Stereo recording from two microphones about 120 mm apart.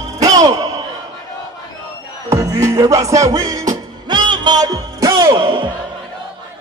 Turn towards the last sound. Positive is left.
turn(degrees=-45)  # may be behind; listen again after turning